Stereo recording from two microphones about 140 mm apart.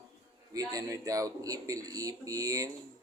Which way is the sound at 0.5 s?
25° right (ahead or behind).